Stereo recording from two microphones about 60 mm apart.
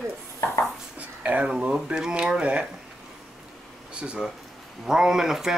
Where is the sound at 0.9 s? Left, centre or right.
Right.